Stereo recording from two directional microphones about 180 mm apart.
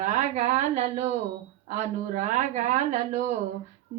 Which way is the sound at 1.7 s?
45° right (ahead or behind).